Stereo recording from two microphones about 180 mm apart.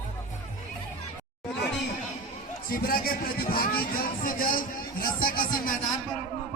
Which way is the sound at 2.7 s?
55° left (ahead or behind).